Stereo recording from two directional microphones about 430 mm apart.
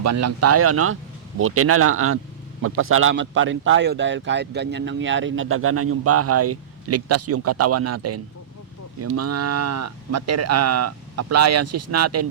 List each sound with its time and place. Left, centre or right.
0.0 s a man's voice: right